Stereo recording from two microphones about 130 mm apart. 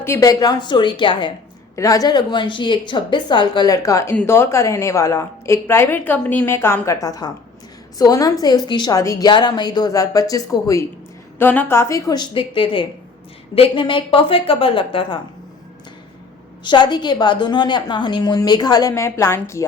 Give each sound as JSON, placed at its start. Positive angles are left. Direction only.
{"t": 0.0, "sound": "a woman's voice", "side_deg": 25}
{"t": 1.7, "sound": "a woman's voice", "side_deg": 25}
{"t": 16.6, "sound": "a woman's voice", "side_deg": 35}